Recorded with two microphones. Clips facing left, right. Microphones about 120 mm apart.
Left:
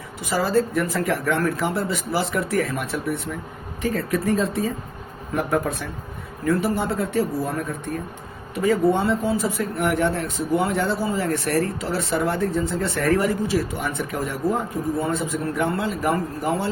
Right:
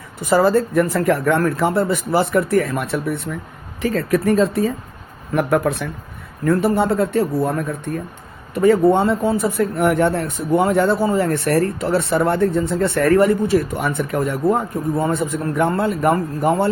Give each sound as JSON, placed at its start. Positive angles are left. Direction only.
{"t": 0.3, "sound": "speech", "side_deg": -55}
{"t": 6.4, "sound": "speech", "side_deg": -60}
{"t": 8.5, "sound": "speech", "side_deg": -60}